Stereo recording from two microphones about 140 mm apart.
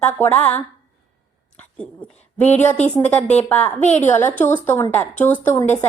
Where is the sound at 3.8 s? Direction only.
55° left (ahead or behind).